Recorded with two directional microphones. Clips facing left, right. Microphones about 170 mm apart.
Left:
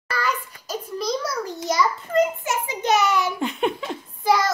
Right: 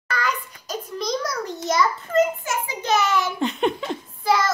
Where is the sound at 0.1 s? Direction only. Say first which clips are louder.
Even; 5° left (ahead or behind).